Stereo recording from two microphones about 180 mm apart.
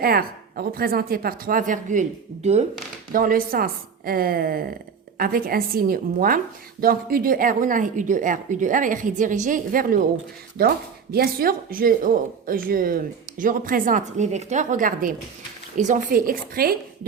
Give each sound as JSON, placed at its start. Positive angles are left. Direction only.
{"t": 0.0, "sound": "speech", "side_deg": -55}
{"t": 3.1, "sound": "speech", "side_deg": -50}
{"t": 10.6, "sound": "speech", "side_deg": -60}